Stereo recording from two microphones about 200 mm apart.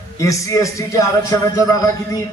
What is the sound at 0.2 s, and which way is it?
A man's voice, 15° left (ahead or behind).